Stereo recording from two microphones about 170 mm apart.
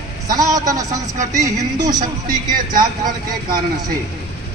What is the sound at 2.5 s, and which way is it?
Speech, 50° right (ahead or behind).